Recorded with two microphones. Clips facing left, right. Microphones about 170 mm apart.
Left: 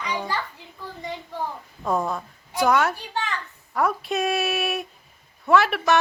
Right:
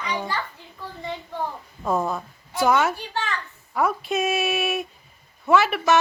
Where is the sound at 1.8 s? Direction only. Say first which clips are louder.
Right 1 dB; centre (ahead or behind).